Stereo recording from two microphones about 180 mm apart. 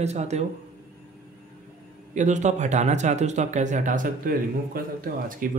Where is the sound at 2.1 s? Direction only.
40° right (ahead or behind).